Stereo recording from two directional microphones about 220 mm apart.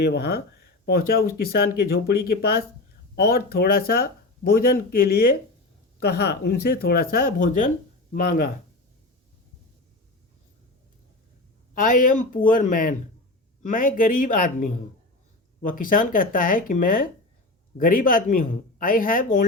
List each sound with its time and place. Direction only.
0.0 s speech: 50° left (ahead or behind)
11.7 s speech: 40° left (ahead or behind)